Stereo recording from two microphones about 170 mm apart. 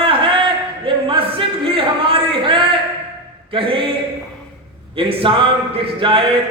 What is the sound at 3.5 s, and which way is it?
Speech, 30° right (ahead or behind).